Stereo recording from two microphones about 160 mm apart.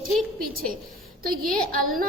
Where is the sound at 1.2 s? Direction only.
65° right (ahead or behind).